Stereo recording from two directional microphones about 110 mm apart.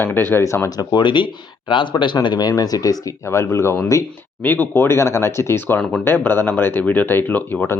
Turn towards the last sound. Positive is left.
turn(degrees=15)  # may be behind; listen again after turning